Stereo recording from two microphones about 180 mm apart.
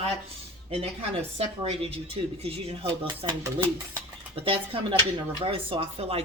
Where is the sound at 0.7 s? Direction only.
30° right (ahead or behind).